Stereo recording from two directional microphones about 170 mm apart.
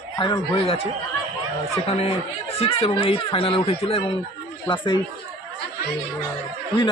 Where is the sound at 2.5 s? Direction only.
35° left (ahead or behind).